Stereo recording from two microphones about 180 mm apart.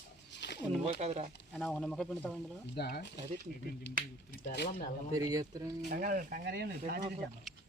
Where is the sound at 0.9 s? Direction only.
35° right (ahead or behind).